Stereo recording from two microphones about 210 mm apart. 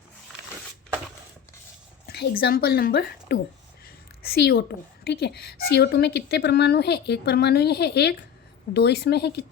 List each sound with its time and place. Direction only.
2.0 s a woman's voice: 50° left (ahead or behind)
3.8 s a sound: 45° left (ahead or behind)
5.0 s a woman's voice: 50° left (ahead or behind)